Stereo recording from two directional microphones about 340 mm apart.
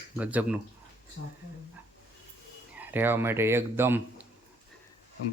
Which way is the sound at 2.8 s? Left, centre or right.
Centre.